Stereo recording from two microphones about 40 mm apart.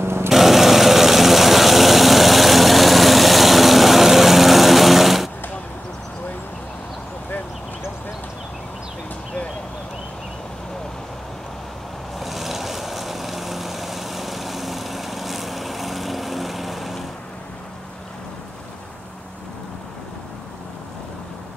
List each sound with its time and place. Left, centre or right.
0.0 s a sound: right
0.3 s vehicle: centre
12.2 s vehicle: centre